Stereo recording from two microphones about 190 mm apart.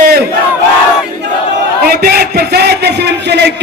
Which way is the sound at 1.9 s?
55° right (ahead or behind).